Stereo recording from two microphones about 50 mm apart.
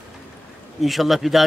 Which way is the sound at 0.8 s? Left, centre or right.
Centre.